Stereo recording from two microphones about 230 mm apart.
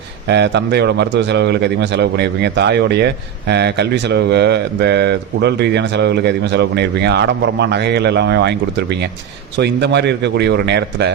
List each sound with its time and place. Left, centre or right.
0.3 s speech: right